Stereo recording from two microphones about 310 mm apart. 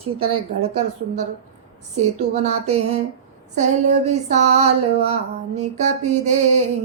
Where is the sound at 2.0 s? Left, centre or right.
Right.